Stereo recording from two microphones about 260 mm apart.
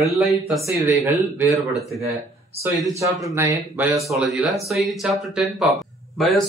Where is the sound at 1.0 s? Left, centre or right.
Centre.